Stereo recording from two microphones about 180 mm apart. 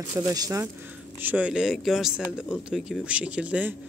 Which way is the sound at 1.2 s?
10° right (ahead or behind).